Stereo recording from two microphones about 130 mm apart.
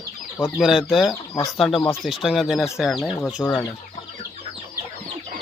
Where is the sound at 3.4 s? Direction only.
20° left (ahead or behind).